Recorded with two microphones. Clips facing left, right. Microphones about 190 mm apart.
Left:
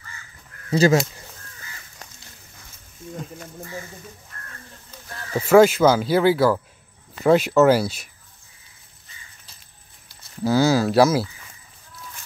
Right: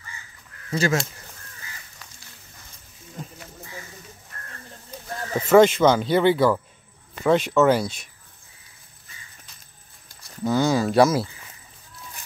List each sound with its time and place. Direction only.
0.7 s speech: 35° left (ahead or behind)
5.5 s speech: 5° left (ahead or behind)
10.4 s speech: 5° left (ahead or behind)